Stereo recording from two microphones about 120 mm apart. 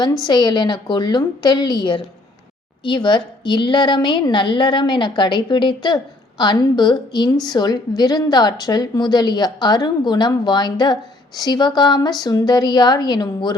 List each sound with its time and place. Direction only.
0.0 s a woman's voice: 35° left (ahead or behind)